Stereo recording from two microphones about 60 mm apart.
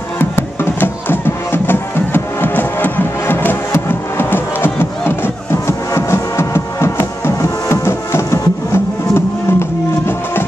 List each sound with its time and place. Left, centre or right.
0.2 s music: left